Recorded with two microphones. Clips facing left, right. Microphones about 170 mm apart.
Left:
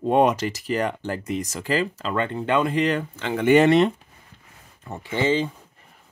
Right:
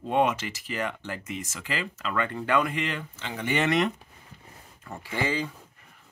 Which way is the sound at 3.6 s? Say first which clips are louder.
Left 8 dB; 30° left (ahead or behind).